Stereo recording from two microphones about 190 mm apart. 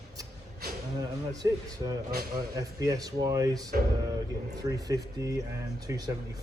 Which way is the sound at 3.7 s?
50° right (ahead or behind).